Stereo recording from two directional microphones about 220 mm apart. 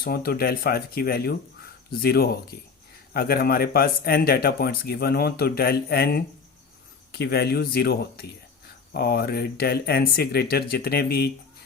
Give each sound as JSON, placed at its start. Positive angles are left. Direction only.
{"t": 0.0, "sound": "speech", "side_deg": 45}